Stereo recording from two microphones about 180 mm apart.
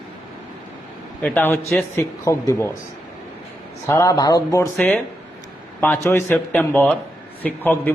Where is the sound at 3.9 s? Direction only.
20° left (ahead or behind).